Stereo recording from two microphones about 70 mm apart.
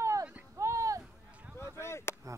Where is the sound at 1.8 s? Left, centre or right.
Left.